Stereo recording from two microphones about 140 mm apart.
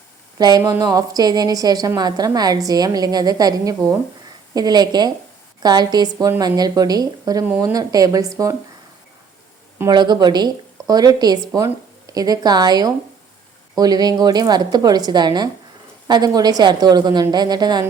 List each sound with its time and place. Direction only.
0.3 s a woman's voice: 30° right (ahead or behind)
9.9 s a woman's voice: 30° right (ahead or behind)